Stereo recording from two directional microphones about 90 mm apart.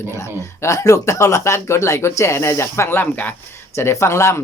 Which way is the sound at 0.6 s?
35° left (ahead or behind).